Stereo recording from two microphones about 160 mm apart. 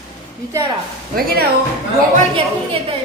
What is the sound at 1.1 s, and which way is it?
Speech, 65° right (ahead or behind).